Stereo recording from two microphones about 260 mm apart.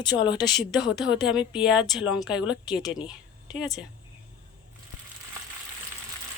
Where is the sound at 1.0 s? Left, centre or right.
Centre.